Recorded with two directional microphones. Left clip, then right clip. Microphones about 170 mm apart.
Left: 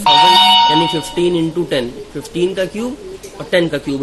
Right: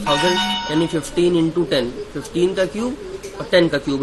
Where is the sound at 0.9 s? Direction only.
15° left (ahead or behind).